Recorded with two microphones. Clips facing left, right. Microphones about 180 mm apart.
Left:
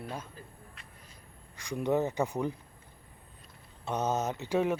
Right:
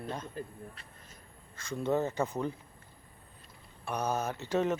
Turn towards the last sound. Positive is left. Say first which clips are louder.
# left 1 dB
turn(degrees=10)  # may be behind; listen again after turning